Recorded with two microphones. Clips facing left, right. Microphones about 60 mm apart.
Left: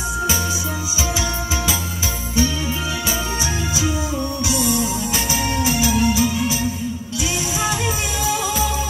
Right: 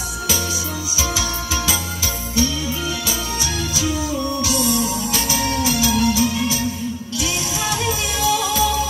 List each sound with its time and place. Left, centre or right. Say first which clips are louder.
4.5 s music: left 2 dB; left
7.8 s music: right 2 dB; centre